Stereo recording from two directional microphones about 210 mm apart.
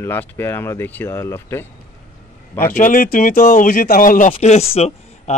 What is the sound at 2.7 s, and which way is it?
Speech, 40° left (ahead or behind).